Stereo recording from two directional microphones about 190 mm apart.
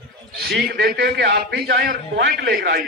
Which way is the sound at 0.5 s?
60° right (ahead or behind).